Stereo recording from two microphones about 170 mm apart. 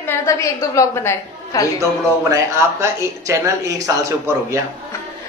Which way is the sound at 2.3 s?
15° right (ahead or behind).